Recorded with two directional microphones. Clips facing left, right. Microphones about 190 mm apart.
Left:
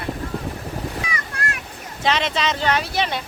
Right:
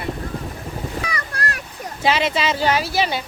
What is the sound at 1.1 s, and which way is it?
Boat, 35° right (ahead or behind).